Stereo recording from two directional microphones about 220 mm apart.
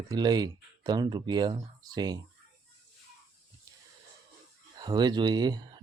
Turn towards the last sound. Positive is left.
turn(degrees=-20)  # may be behind; listen again after turning